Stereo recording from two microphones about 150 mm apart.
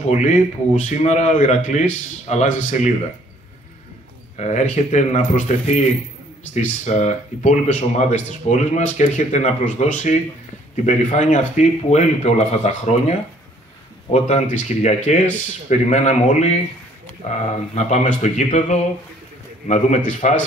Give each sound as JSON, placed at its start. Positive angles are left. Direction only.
{"t": 0.0, "sound": "speech", "side_deg": 50}
{"t": 4.4, "sound": "speech", "side_deg": 50}